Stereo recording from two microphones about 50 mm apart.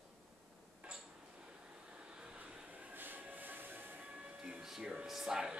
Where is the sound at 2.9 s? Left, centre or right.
Right.